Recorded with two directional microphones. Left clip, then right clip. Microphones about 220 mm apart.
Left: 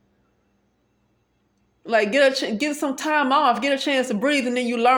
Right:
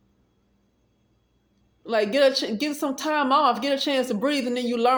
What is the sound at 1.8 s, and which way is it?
Speech, 25° left (ahead or behind).